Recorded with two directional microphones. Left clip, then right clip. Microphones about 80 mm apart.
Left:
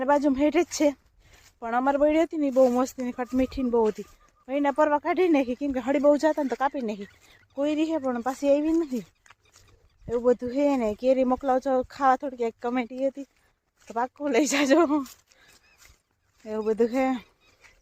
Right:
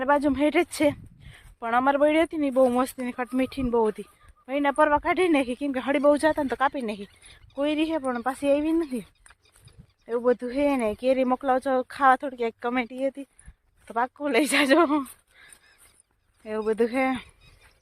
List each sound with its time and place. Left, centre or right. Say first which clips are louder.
0.0 s speech: even; left
0.4 s speech: even; centre
10.2 s speech: even; left
16.5 s speech: even; left